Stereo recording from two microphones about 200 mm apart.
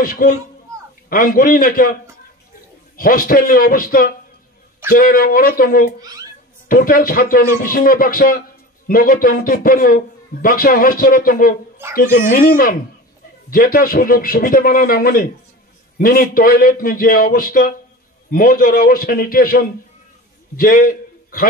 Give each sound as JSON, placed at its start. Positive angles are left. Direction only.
{"t": 0.0, "sound": "a man's voice", "side_deg": 45}
{"t": 3.0, "sound": "a man's voice", "side_deg": 45}